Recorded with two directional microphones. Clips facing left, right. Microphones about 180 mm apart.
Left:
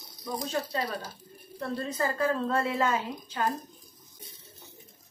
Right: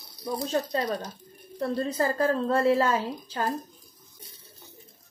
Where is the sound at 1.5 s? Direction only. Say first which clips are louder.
Right 5 dB; 35° right (ahead or behind).